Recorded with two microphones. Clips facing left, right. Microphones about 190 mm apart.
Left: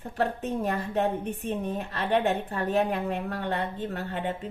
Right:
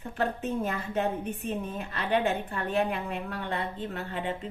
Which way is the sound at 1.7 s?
40° left (ahead or behind).